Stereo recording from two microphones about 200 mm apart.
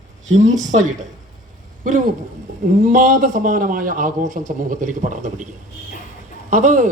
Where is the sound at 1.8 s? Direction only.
40° right (ahead or behind).